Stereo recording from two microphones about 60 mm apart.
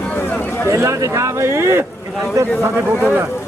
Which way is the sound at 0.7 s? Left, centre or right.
Right.